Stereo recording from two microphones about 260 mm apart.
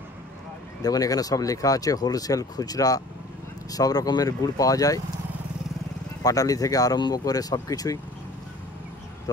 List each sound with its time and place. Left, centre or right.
0.8 s speech: centre
6.2 s speech: centre